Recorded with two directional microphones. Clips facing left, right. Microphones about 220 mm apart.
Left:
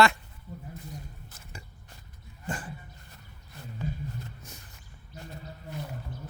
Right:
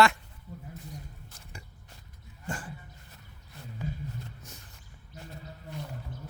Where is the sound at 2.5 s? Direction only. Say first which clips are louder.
Left 2 dB; 20° left (ahead or behind).